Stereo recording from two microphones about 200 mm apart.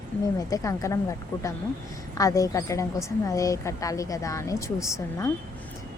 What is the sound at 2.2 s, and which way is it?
A woman's voice, 15° left (ahead or behind).